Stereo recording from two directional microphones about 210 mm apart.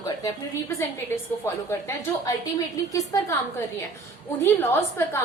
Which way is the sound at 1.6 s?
15° left (ahead or behind).